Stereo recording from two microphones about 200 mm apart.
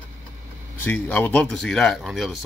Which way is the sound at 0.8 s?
10° left (ahead or behind).